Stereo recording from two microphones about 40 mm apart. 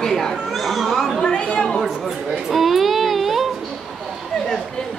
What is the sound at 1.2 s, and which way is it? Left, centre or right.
Speech, left.